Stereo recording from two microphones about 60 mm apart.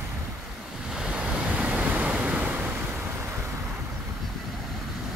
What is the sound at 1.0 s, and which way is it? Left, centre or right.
Waves, centre.